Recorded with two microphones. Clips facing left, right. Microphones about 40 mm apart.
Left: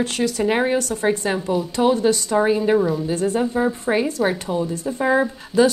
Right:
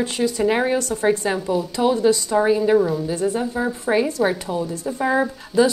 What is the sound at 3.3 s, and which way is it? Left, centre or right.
Speech, centre.